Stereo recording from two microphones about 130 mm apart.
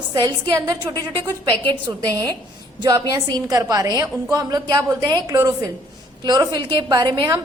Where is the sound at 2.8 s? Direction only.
35° right (ahead or behind).